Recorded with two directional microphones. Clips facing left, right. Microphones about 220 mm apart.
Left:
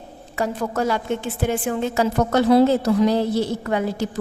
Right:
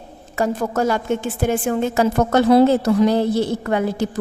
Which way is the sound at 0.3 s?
45° right (ahead or behind).